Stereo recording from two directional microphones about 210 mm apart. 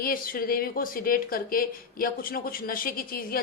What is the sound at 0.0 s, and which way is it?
Speech, 45° left (ahead or behind).